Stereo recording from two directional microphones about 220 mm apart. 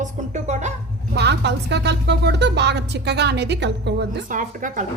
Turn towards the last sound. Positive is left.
turn(degrees=-35)  # may be behind; listen again after turning